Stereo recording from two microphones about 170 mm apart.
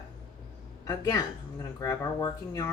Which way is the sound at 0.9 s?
20° left (ahead or behind).